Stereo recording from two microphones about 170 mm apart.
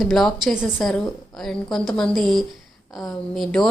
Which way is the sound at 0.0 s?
Centre (ahead or behind).